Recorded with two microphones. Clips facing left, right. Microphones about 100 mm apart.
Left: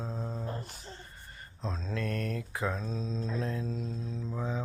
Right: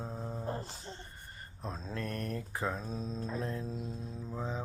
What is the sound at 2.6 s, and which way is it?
Speech, 5° right (ahead or behind).